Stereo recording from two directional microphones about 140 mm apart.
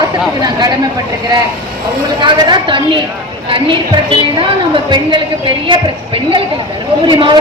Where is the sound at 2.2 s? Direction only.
30° right (ahead or behind).